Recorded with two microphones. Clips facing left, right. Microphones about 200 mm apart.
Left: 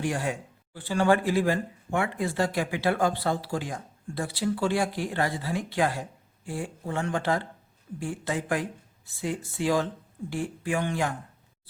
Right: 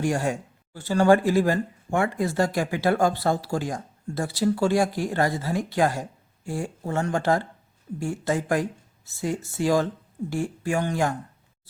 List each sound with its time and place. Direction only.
0.0 s speech: 45° right (ahead or behind)